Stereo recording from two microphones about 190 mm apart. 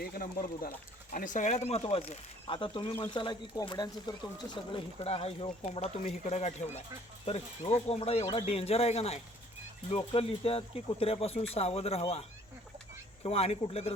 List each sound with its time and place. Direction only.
0.0 s speech: 50° left (ahead or behind); by 12.2 s 30° left (ahead or behind)
13.2 s speech: 30° left (ahead or behind)